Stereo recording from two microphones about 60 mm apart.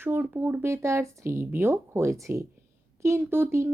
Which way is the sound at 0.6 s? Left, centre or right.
Right.